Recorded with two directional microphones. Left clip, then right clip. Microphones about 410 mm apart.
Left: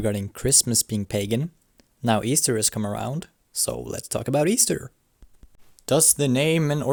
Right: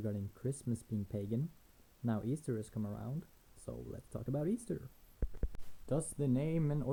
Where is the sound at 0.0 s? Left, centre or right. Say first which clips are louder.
Left 17 dB; left.